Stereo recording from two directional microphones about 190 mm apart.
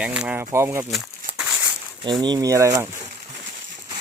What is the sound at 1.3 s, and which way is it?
Crumpling, 5° right (ahead or behind).